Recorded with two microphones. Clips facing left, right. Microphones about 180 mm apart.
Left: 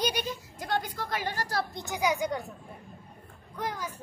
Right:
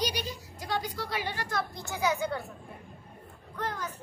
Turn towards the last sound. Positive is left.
turn(degrees=10)  # may be behind; listen again after turning